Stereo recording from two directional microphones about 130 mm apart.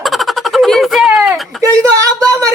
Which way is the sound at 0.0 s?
Centre (ahead or behind).